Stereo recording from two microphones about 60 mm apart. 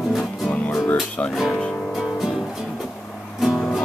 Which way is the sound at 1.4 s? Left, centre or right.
Centre.